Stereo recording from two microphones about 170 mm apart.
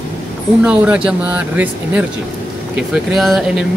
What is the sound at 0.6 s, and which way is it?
Speech, 5° right (ahead or behind).